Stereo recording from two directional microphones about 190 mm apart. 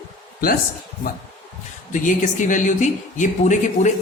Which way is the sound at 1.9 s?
40° left (ahead or behind).